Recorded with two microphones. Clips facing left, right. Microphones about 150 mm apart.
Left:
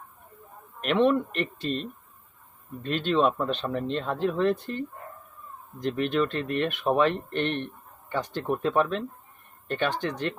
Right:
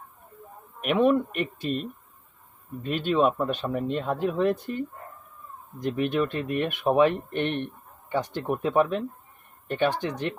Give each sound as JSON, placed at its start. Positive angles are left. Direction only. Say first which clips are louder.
{"t": 0.8, "sound": "speech", "louder": "right 1 dB", "side_deg": -10}